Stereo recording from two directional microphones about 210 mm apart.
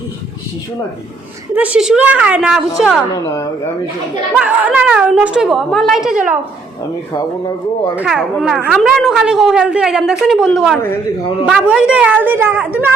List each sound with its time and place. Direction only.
1.5 s a woman's voice: 5° right (ahead or behind)
3.1 s speech: 15° left (ahead or behind)
4.4 s a woman's voice: 5° right (ahead or behind)
7.1 s speech: 15° left (ahead or behind)
7.9 s a woman's voice: 5° right (ahead or behind)